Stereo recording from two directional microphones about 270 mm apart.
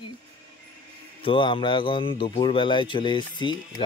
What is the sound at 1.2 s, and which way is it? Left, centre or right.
A man's voice, centre.